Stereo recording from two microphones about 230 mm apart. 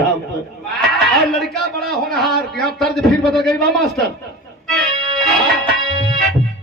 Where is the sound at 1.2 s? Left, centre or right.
Centre.